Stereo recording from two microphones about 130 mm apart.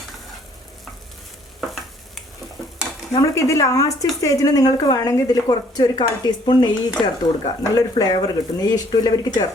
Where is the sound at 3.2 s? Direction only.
25° left (ahead or behind).